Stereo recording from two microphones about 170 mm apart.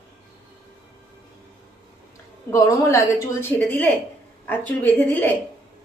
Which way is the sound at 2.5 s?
15° left (ahead or behind).